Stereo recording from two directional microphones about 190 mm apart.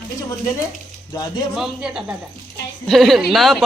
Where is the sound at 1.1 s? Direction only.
20° left (ahead or behind).